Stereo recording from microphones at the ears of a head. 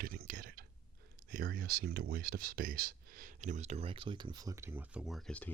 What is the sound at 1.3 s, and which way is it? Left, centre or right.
Speech, right.